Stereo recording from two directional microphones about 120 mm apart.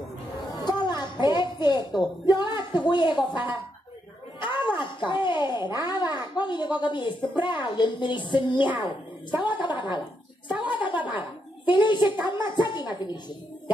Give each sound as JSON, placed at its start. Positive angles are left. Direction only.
{"t": 0.5, "sound": "a sound", "side_deg": 35}
{"t": 2.9, "sound": "a child's voice", "side_deg": 40}
{"t": 9.3, "sound": "a woman's voice", "side_deg": -15}
{"t": 9.8, "sound": "a child's voice", "side_deg": 40}
{"t": 11.0, "sound": "speech", "side_deg": -15}
{"t": 11.7, "sound": "a child's voice", "side_deg": 40}